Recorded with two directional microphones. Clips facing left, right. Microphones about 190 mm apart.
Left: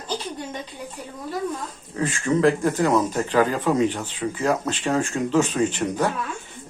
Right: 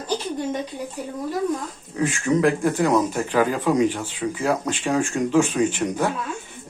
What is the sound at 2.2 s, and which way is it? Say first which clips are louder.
Speech: left 1 dB; 10° right (ahead or behind).